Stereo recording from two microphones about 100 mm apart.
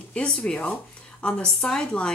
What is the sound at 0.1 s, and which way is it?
Speech, 10° left (ahead or behind).